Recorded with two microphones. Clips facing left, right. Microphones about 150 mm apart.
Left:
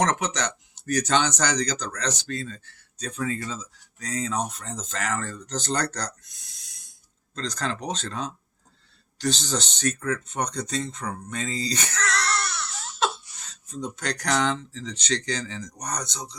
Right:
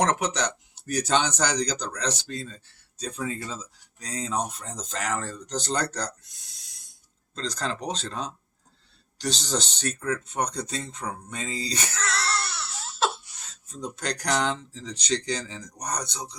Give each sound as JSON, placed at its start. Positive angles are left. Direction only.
{"t": 0.0, "sound": "speech", "side_deg": -10}
{"t": 7.4, "sound": "speech", "side_deg": -10}
{"t": 9.2, "sound": "speech", "side_deg": -10}
{"t": 12.0, "sound": "baby cry", "side_deg": -30}
{"t": 13.8, "sound": "speech", "side_deg": -10}